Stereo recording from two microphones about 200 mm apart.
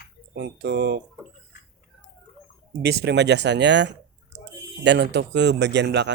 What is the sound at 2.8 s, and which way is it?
Speech, 55° right (ahead or behind).